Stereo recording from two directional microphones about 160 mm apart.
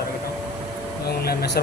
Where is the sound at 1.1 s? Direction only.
75° left (ahead or behind).